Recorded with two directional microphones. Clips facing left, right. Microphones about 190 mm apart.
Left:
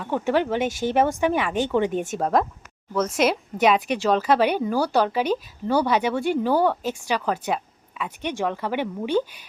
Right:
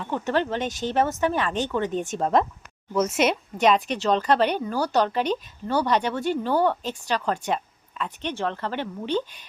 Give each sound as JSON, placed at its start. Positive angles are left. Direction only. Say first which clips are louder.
{"t": 0.0, "sound": "speech", "louder": "left 3 dB", "side_deg": 10}
{"t": 2.9, "sound": "speech", "louder": "even", "side_deg": -10}
{"t": 3.2, "sound": "speech", "louder": "left 1 dB", "side_deg": 5}